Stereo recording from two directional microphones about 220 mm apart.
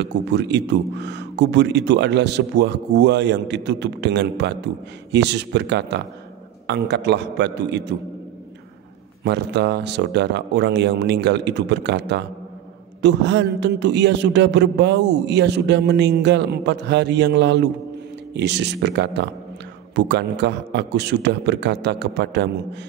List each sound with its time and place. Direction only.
0.0 s speech: 50° right (ahead or behind)
9.2 s speech: 50° right (ahead or behind)